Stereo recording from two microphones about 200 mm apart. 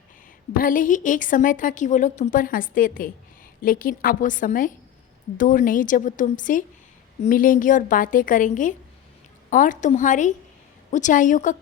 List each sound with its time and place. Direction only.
0.6 s a woman's voice: 45° left (ahead or behind)